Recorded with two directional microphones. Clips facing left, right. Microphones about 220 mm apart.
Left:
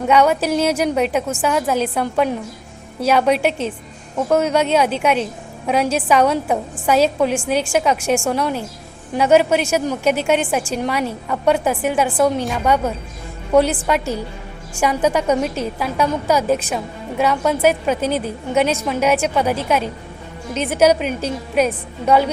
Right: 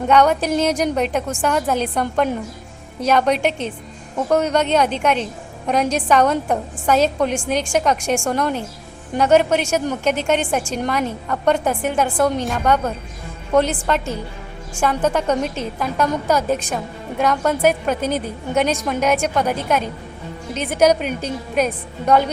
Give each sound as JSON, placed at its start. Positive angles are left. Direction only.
{"t": 0.1, "sound": "a woman's voice", "side_deg": 5}